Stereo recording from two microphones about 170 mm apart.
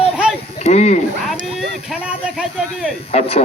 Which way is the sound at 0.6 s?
40° left (ahead or behind).